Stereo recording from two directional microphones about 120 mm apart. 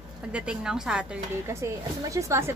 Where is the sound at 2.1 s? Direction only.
25° right (ahead or behind).